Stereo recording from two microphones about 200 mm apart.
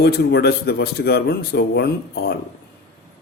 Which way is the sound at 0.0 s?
55° left (ahead or behind).